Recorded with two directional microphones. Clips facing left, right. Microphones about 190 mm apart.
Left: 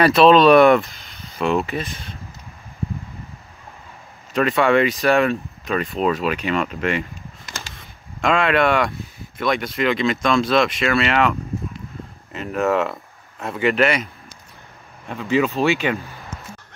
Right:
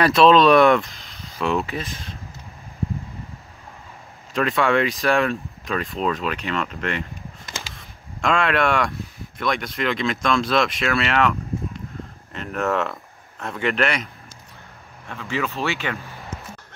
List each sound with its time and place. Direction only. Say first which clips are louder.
0.0 s speech: left 2 dB; centre (ahead or behind)
4.3 s speech: left 3 dB; centre (ahead or behind)
7.7 s a sound: even; centre (ahead or behind)
9.4 s speech: left 4 dB; centre (ahead or behind)
15.0 s speech: left 7 dB; 15° left (ahead or behind)